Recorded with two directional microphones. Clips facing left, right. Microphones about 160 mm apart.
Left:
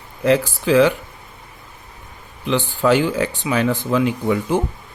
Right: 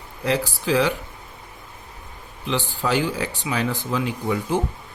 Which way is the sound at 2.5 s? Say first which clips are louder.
Left 7 dB; 60° left (ahead or behind).